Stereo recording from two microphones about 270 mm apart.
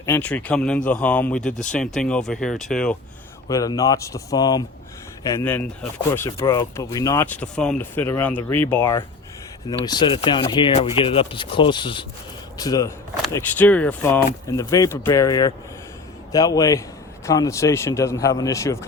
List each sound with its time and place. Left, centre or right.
0.0 s speech: centre
3.5 s speech: centre